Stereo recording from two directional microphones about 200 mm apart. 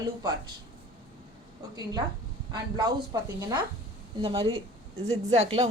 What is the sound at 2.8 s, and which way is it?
A woman's voice, 20° right (ahead or behind).